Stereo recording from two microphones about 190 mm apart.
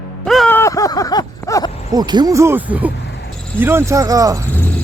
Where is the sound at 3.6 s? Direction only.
15° right (ahead or behind).